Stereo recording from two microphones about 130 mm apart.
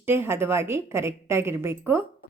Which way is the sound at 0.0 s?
20° right (ahead or behind).